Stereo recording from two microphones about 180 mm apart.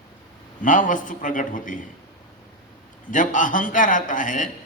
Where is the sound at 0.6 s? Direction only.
45° left (ahead or behind).